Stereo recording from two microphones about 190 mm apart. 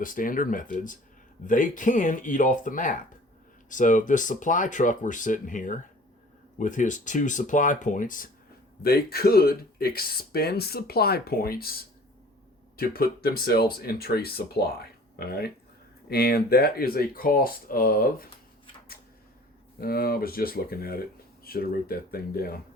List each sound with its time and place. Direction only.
0.0 s speech: 45° left (ahead or behind)
19.8 s speech: 55° left (ahead or behind)